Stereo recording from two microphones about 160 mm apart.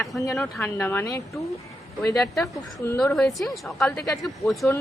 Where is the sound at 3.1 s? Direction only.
Centre (ahead or behind).